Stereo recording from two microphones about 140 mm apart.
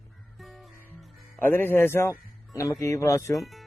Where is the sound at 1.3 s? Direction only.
15° left (ahead or behind).